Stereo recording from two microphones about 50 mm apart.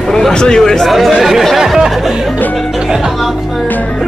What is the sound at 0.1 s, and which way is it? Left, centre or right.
Speech, centre.